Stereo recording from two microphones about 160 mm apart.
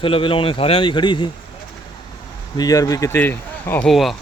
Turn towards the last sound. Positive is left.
turn(degrees=0)  # may be behind; listen again after turning